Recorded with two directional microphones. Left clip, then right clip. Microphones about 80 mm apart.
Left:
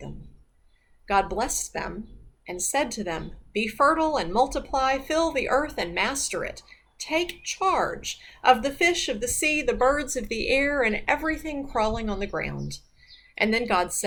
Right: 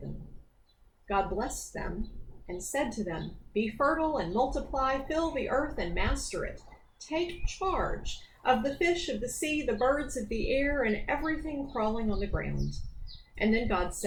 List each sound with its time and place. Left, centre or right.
1.0 s speech: left